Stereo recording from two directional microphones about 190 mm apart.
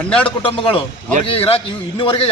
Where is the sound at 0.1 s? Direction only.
5° left (ahead or behind).